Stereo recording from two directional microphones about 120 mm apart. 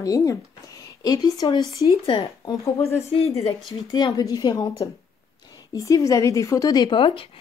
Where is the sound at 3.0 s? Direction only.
60° left (ahead or behind).